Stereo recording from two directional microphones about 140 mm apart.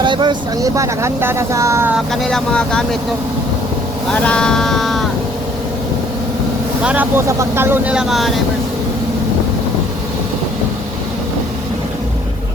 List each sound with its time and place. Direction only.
0.0 s speech: 35° right (ahead or behind)
2.2 s speech: 5° left (ahead or behind)
4.1 s speech: 5° left (ahead or behind)
6.8 s speech: 10° right (ahead or behind)